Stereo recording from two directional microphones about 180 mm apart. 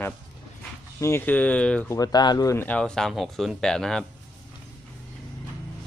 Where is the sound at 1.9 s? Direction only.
20° left (ahead or behind); by 4.0 s 5° left (ahead or behind).